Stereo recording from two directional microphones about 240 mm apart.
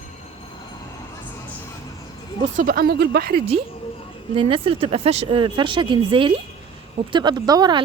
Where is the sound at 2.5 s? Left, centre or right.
Right.